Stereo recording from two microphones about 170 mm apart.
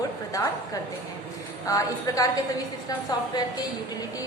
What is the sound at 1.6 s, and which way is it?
Speech, 20° left (ahead or behind).